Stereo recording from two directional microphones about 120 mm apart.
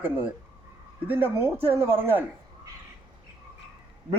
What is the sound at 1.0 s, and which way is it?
A man's voice, 15° right (ahead or behind).